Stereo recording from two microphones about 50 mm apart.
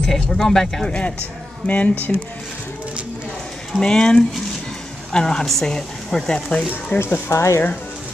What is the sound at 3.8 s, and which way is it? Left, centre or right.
Speech, centre.